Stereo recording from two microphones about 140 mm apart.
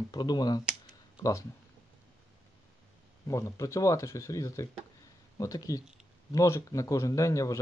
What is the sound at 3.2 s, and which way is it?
Speech, 20° left (ahead or behind).